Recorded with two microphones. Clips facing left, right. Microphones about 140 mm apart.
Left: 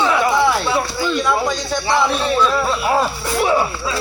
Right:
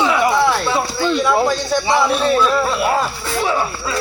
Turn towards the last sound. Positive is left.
turn(degrees=15)  # may be behind; listen again after turning